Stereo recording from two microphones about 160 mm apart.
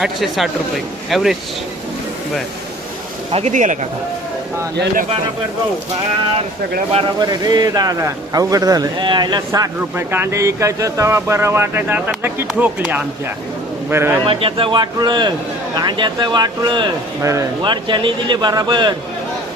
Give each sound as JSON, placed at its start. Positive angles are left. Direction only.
{"t": 0.0, "sound": "speech", "side_deg": 0}
{"t": 3.3, "sound": "speech", "side_deg": -50}
{"t": 7.2, "sound": "a man's voice", "side_deg": -25}
{"t": 14.2, "sound": "a man's voice", "side_deg": -35}